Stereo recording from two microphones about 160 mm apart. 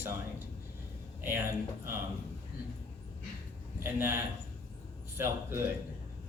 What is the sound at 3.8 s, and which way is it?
A man's voice, 15° right (ahead or behind).